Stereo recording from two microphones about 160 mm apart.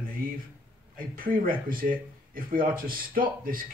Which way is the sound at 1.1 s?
60° right (ahead or behind).